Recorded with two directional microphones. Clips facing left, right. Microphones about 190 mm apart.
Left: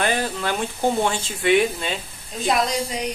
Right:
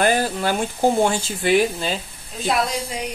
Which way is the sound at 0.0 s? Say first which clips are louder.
Right 4 dB; 40° right (ahead or behind).